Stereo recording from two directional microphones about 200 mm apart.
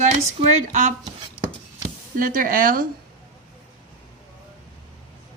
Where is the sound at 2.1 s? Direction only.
45° right (ahead or behind).